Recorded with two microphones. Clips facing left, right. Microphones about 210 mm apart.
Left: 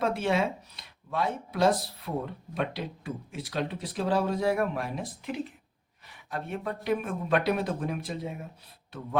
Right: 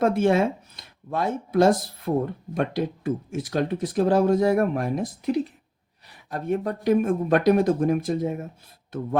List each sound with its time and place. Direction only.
0.0 s speech: 50° right (ahead or behind)